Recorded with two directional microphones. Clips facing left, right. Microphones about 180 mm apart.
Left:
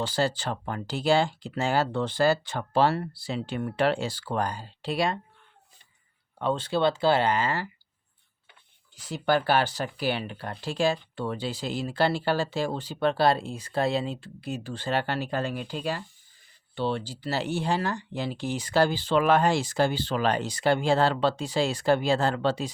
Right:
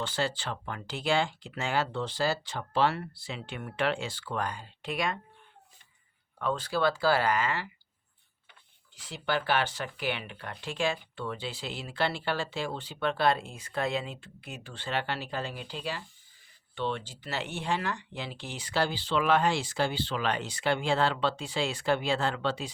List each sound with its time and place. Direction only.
0.0 s speech: 40° left (ahead or behind)
1.9 s speech: 55° left (ahead or behind)
2.8 s speech: 35° left (ahead or behind)
6.4 s speech: 25° left (ahead or behind)
9.0 s speech: 45° left (ahead or behind)
16.7 s speech: 35° left (ahead or behind)